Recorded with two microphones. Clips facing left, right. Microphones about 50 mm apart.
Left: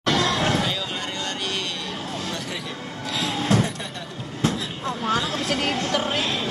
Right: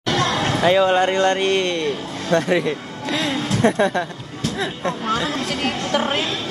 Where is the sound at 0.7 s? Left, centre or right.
Right.